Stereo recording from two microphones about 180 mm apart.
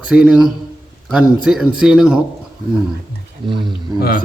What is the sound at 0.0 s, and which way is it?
A man's voice, 5° right (ahead or behind).